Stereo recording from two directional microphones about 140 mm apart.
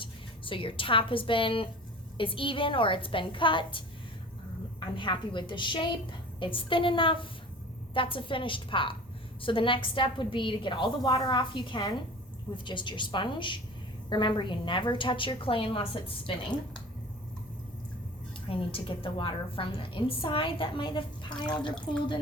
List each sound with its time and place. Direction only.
0.0 s a woman's voice: 40° left (ahead or behind)
4.9 s a woman's voice: 35° left (ahead or behind)
18.4 s a woman's voice: 40° left (ahead or behind)